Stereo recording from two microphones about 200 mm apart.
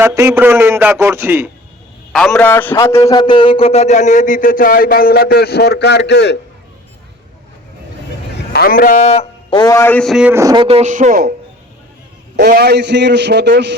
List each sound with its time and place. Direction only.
0.0 s a man's voice: 15° right (ahead or behind)
2.1 s a man's voice: 5° left (ahead or behind); by 6.4 s 60° left (ahead or behind)
8.5 s a man's voice: 45° left (ahead or behind); by 11.3 s 45° right (ahead or behind)
12.4 s a man's voice: 50° right (ahead or behind)